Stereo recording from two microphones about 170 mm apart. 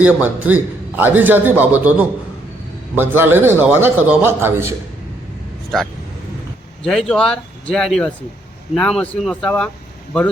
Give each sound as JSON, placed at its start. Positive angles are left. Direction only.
{"t": 0.0, "sound": "a man's voice", "side_deg": -10}
{"t": 6.8, "sound": "speech", "side_deg": 5}